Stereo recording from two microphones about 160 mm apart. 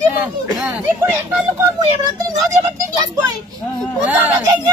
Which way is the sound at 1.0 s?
15° right (ahead or behind).